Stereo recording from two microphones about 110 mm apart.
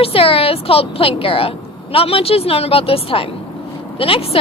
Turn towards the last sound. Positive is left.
turn(degrees=60)  # may be behind; listen again after turning